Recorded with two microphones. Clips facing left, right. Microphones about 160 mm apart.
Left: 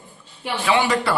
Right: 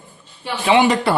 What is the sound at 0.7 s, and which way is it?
Speech, 20° right (ahead or behind).